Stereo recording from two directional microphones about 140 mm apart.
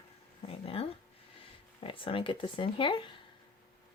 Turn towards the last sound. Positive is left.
turn(degrees=40)  # may be behind; listen again after turning